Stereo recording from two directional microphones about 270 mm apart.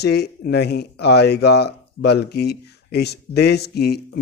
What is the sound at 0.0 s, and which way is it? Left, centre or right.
Speech, left.